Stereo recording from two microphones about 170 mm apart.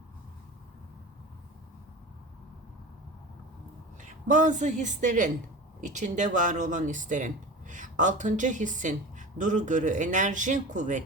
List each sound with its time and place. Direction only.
4.0 s speech: 45° right (ahead or behind)